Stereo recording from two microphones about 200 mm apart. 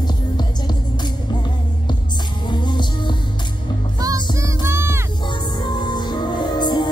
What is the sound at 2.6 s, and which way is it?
Music, 20° left (ahead or behind).